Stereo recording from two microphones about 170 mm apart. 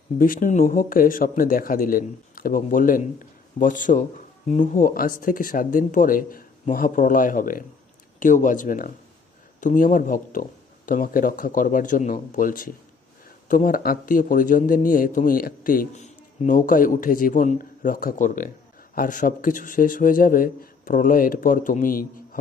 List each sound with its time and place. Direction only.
0.2 s a man's voice: 55° left (ahead or behind)